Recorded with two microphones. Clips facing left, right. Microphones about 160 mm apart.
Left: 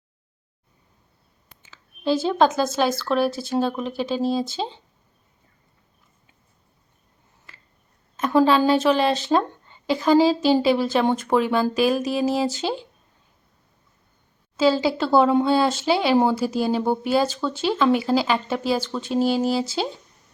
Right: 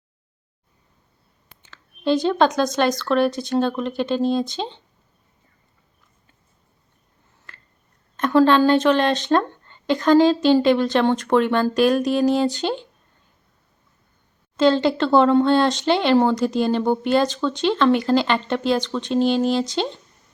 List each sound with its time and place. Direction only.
1.6 s speech: 5° left (ahead or behind)
7.5 s a sound: 5° left (ahead or behind)
8.1 s speech: 5° left (ahead or behind)
14.5 s speech: 5° left (ahead or behind)